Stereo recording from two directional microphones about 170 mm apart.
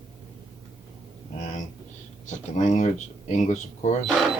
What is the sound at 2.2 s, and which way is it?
Speech, 45° left (ahead or behind).